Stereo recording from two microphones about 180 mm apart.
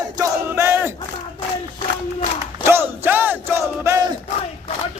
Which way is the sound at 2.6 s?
10° right (ahead or behind).